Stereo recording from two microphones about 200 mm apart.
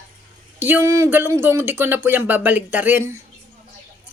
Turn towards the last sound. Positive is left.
turn(degrees=-10)  # may be behind; listen again after turning